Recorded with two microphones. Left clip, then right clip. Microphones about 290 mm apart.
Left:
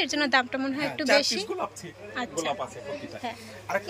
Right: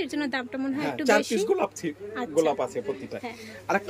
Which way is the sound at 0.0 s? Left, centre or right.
Centre.